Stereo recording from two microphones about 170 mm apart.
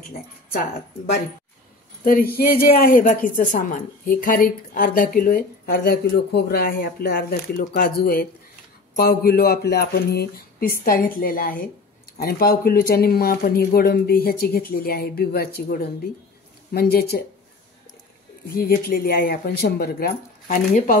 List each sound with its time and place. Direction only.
0.5 s a woman's voice: 60° left (ahead or behind)
2.0 s a woman's voice: 60° left (ahead or behind)
18.5 s a woman's voice: 65° left (ahead or behind)